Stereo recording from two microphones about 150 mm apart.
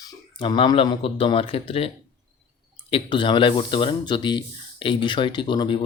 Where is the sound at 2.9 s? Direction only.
35° left (ahead or behind).